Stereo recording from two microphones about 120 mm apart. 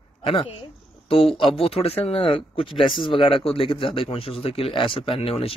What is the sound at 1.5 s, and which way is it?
Speech, 55° left (ahead or behind).